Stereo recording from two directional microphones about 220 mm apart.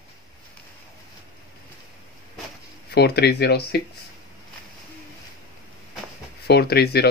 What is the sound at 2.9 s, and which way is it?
Speech, 45° left (ahead or behind).